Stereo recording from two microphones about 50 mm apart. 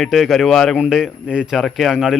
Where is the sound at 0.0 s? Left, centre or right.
Centre.